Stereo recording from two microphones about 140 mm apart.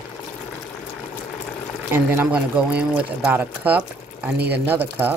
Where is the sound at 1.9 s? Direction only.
15° right (ahead or behind).